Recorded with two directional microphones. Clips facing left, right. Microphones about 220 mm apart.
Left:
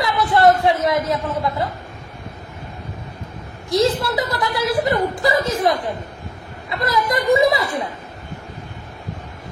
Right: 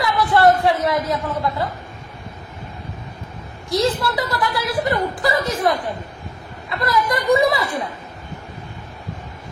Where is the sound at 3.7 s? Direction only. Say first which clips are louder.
Left 2 dB; 20° left (ahead or behind).